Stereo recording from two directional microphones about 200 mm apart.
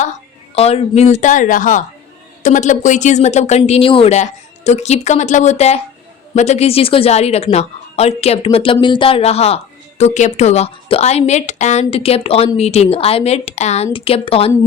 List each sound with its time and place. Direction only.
0.5 s speech: 30° left (ahead or behind)